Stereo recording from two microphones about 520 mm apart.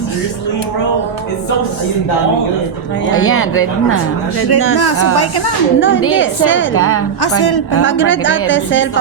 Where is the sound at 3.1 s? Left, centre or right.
Left.